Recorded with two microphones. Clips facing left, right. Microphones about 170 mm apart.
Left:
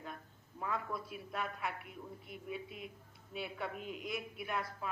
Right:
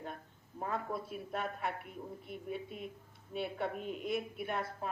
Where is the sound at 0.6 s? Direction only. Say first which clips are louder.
Right 2 dB; 40° right (ahead or behind).